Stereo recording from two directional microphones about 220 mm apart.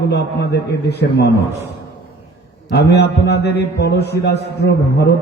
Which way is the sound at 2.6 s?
50° left (ahead or behind).